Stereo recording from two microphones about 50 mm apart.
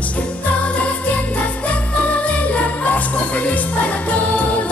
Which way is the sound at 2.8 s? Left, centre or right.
Left.